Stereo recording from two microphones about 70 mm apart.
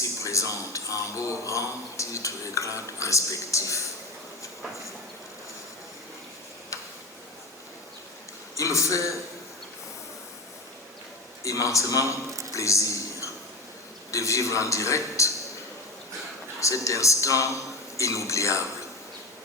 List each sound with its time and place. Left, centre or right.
0.0 s speech: left
8.5 s speech: left
11.4 s speech: left
12.3 s a sound: right
12.5 s a sound: left
14.1 s speech: left
16.6 s speech: left